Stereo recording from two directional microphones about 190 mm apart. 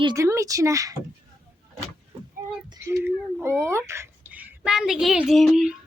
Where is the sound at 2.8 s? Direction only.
15° right (ahead or behind).